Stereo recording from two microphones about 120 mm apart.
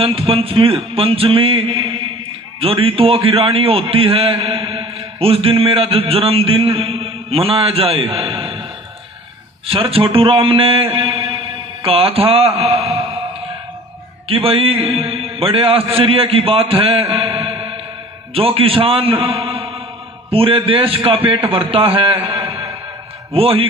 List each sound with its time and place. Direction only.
0.0 s a man's voice: 50° right (ahead or behind)
9.6 s a man's voice: 50° right (ahead or behind)
14.3 s a man's voice: 50° right (ahead or behind)
17.2 s mantra: 50° right (ahead or behind)
18.3 s a man's voice: 50° right (ahead or behind)